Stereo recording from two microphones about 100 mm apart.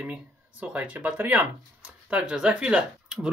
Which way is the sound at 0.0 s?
15° right (ahead or behind).